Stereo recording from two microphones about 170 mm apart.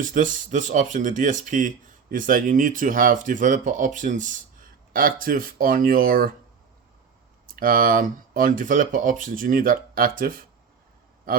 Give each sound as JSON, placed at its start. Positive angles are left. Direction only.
{"t": 0.0, "sound": "speech", "side_deg": -50}
{"t": 7.5, "sound": "speech", "side_deg": -55}